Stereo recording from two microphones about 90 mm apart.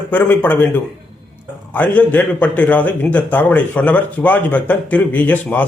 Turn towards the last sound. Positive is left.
turn(degrees=20)  # may be behind; listen again after turning